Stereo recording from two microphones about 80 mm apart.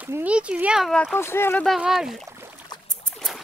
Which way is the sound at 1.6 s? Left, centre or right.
Centre.